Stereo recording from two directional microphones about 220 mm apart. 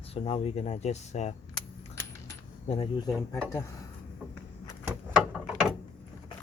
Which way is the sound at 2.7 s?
25° left (ahead or behind).